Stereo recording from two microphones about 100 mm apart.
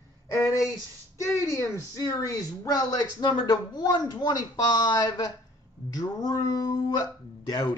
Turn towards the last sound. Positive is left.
turn(degrees=40)  # may be behind; listen again after turning